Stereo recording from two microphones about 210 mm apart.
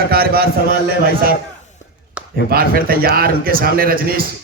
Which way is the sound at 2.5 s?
45° right (ahead or behind).